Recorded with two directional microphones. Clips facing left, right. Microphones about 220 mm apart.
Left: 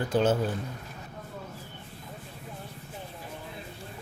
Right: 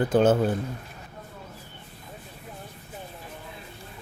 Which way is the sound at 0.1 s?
55° right (ahead or behind).